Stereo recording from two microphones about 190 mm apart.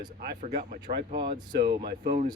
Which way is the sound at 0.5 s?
50° right (ahead or behind).